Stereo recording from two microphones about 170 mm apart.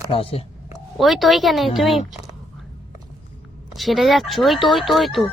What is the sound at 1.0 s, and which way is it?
Speech, centre (ahead or behind).